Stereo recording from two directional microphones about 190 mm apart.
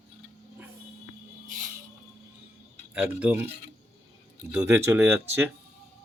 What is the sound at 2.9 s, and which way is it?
Speech, 10° right (ahead or behind).